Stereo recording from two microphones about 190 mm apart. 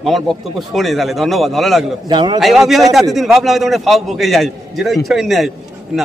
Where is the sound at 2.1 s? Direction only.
25° right (ahead or behind).